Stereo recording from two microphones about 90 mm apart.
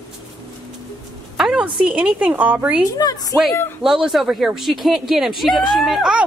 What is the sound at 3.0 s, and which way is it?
Speech, 45° left (ahead or behind).